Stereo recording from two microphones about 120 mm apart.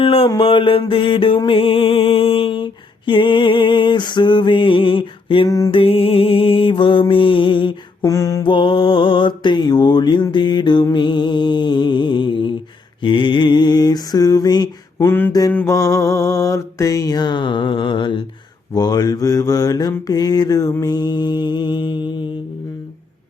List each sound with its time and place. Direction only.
0.0 s mantra: 50° left (ahead or behind)
0.3 s music: 50° left (ahead or behind)
5.5 s mantra: 30° left (ahead or behind)
5.7 s music: 50° left (ahead or behind)
8.0 s mantra: 25° left (ahead or behind)
8.4 s mantra: 45° left (ahead or behind)
10.9 s music: 40° left (ahead or behind)
13.0 s mantra: 45° left (ahead or behind)
15.0 s mantra: 15° left (ahead or behind)
15.3 s mantra: 30° left (ahead or behind)